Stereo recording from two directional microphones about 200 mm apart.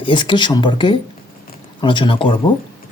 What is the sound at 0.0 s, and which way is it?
Speech, 25° left (ahead or behind).